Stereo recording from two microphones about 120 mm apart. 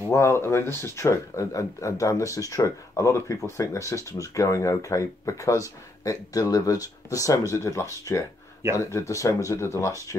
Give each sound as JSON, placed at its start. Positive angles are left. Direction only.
{"t": 0.1, "sound": "speech", "side_deg": 25}